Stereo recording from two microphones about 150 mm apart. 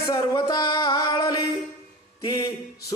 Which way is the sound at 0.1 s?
30° left (ahead or behind).